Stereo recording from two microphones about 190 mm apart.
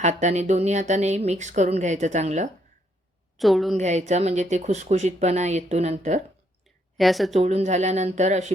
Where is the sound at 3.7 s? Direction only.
35° right (ahead or behind).